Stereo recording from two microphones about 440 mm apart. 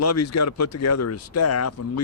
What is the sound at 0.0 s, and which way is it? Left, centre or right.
Speech, left.